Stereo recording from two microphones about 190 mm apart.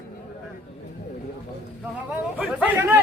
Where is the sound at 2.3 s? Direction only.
5° right (ahead or behind).